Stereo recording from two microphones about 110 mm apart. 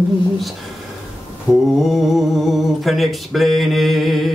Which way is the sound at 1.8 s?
Centre (ahead or behind).